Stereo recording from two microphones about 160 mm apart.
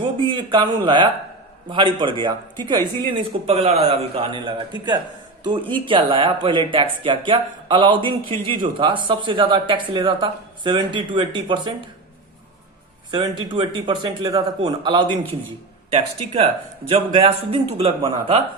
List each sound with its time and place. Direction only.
0.2 s a man's voice: 30° right (ahead or behind)
13.1 s a man's voice: 30° right (ahead or behind)
15.9 s speech: 40° right (ahead or behind)